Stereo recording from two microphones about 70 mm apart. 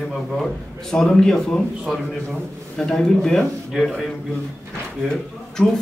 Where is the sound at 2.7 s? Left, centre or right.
Centre.